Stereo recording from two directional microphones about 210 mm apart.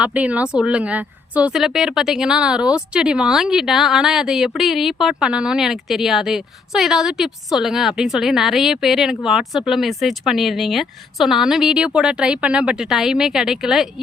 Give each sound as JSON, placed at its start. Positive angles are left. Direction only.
{"t": 0.0, "sound": "a woman's voice", "side_deg": -5}